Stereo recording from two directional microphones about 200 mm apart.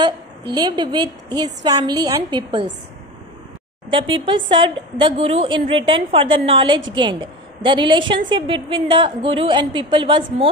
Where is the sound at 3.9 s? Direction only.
25° right (ahead or behind).